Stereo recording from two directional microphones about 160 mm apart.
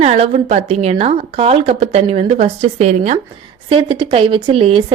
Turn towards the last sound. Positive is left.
turn(degrees=-35)  # may be behind; listen again after turning